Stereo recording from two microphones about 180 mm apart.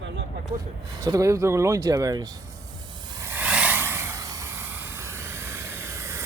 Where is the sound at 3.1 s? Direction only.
15° right (ahead or behind).